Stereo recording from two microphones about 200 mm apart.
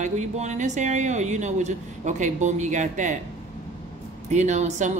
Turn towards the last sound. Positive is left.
turn(degrees=-35)  # may be behind; listen again after turning